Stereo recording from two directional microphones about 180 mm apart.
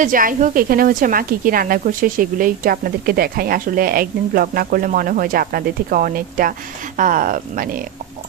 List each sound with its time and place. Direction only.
0.0 s a woman's voice: 50° right (ahead or behind)